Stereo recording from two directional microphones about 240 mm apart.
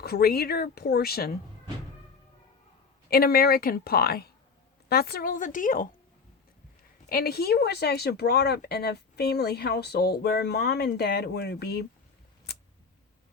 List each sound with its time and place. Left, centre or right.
0.0 s speech: left
3.1 s speech: left
7.1 s speech: left